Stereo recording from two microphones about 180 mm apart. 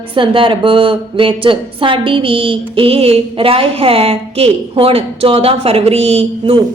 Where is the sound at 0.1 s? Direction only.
30° right (ahead or behind).